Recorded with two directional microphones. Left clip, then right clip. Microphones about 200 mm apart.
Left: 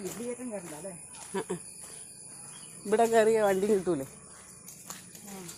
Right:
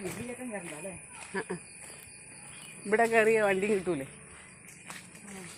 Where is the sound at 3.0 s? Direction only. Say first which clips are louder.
Left 1 dB; centre (ahead or behind).